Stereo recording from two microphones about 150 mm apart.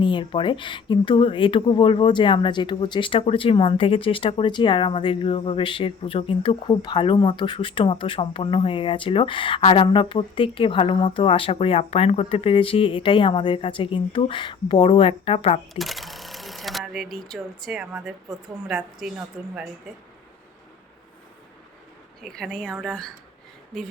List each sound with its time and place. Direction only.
0.0 s speech: 35° left (ahead or behind)
15.7 s a woman's voice: centre (ahead or behind)
22.2 s speech: centre (ahead or behind)